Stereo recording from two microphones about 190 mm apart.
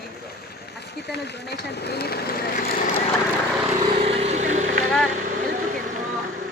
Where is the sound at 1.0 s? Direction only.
60° left (ahead or behind).